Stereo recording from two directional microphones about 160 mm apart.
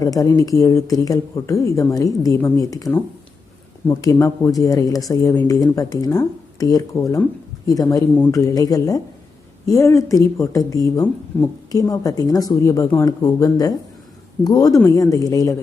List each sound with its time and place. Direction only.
0.0 s speech: 20° left (ahead or behind)